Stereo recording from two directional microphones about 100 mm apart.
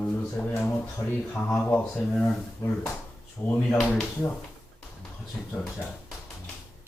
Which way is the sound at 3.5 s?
20° left (ahead or behind).